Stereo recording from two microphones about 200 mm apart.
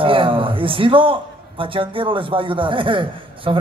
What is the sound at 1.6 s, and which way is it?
A man's voice, 25° right (ahead or behind).